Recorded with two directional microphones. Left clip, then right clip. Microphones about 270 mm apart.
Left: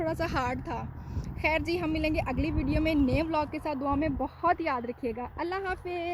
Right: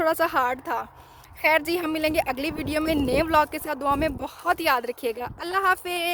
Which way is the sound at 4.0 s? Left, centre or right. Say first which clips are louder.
Right 2 dB; right.